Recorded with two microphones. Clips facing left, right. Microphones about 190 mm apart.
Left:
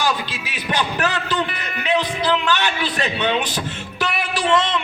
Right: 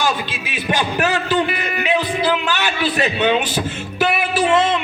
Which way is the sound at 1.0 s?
10° right (ahead or behind).